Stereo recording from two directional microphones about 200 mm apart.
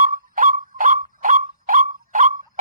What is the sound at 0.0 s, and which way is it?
Whistle, 45° right (ahead or behind).